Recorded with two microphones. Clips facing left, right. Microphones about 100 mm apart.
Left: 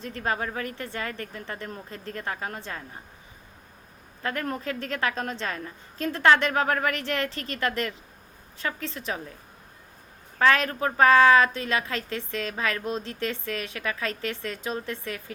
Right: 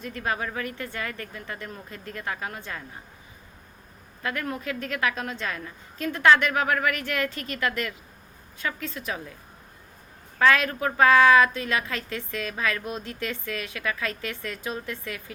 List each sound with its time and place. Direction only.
0.0 s a woman's voice: 30° left (ahead or behind)
4.2 s a woman's voice: 35° left (ahead or behind)
10.3 s a woman's voice: 25° left (ahead or behind)